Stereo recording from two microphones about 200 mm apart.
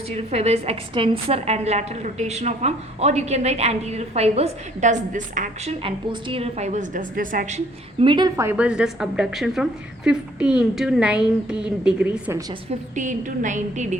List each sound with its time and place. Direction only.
0.1 s a woman's voice: 30° right (ahead or behind)
5.8 s a woman's voice: 25° right (ahead or behind); by 12.4 s 5° right (ahead or behind)
13.0 s a woman's voice: 40° right (ahead or behind)